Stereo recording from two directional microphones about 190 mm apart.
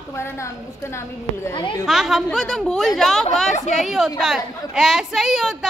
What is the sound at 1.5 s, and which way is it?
Speech, 25° left (ahead or behind).